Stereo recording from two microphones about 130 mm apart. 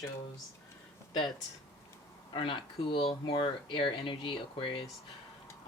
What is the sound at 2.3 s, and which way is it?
Speech, 45° left (ahead or behind).